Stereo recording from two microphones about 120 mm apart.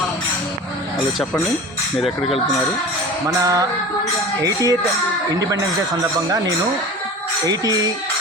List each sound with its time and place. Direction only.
3.2 s music: 30° right (ahead or behind)
4.4 s speech: 30° right (ahead or behind)
7.4 s music: 30° right (ahead or behind)